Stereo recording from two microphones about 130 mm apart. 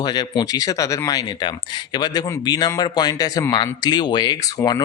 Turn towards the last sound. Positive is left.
turn(degrees=30)  # may be behind; listen again after turning